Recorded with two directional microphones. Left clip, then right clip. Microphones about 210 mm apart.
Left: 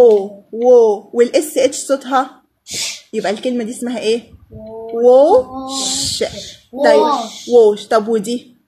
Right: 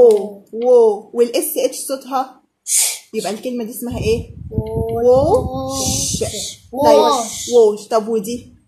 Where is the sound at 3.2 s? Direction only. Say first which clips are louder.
Left 8 dB; 35° left (ahead or behind).